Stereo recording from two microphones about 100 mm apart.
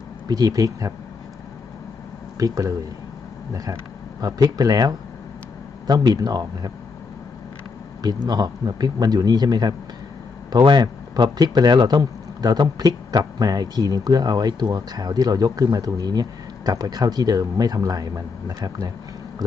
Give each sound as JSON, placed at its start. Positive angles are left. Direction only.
{"t": 0.3, "sound": "speech", "side_deg": -40}
{"t": 2.4, "sound": "speech", "side_deg": -35}
{"t": 4.2, "sound": "speech", "side_deg": -40}
{"t": 8.0, "sound": "speech", "side_deg": -40}